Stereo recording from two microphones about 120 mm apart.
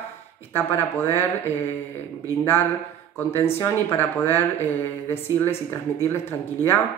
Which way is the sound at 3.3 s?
20° left (ahead or behind).